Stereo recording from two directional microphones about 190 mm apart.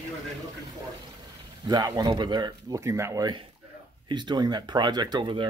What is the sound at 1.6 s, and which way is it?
Speech, 20° right (ahead or behind).